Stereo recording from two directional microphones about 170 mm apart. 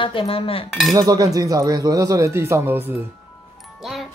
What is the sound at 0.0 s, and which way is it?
Cutlery, 30° left (ahead or behind).